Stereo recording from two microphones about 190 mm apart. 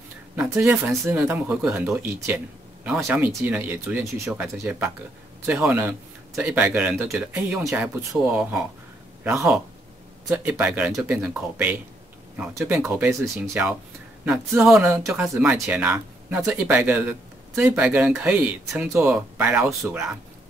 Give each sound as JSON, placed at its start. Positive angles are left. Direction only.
{"t": 0.4, "sound": "speech", "side_deg": -5}